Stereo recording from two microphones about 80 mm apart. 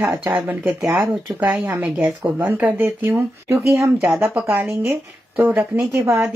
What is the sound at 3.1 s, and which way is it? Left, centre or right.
Speech, right.